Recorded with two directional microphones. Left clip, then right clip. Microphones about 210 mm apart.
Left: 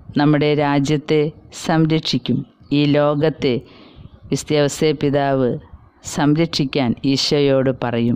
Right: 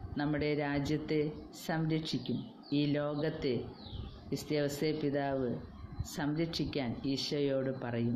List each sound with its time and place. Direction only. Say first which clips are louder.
0.1 s a woman's voice: left 18 dB; 45° left (ahead or behind)